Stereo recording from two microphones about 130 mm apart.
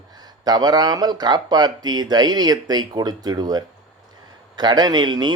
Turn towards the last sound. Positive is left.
turn(degrees=-35)  # may be behind; listen again after turning